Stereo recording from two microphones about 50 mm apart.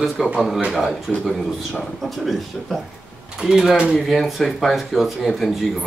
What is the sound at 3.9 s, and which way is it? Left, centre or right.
Speech, centre.